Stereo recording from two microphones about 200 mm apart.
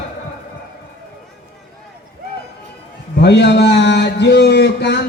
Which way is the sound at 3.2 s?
60° left (ahead or behind).